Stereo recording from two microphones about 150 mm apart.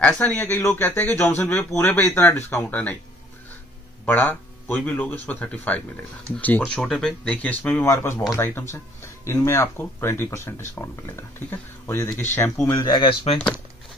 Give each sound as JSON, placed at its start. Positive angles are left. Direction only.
{"t": 0.0, "sound": "speech", "side_deg": 10}
{"t": 4.0, "sound": "speech", "side_deg": 10}
{"t": 12.7, "sound": "speech", "side_deg": 30}